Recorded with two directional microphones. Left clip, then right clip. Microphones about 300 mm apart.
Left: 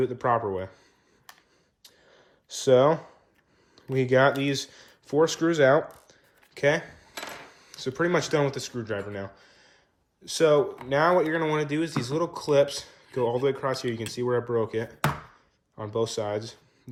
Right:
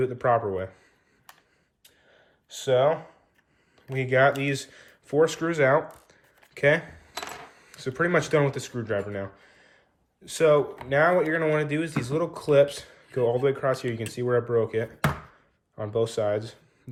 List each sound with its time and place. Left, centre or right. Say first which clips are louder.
0.0 s speech: right 1 dB; centre
1.8 s a sound: left 2 dB; centre
3.9 s speech: even; centre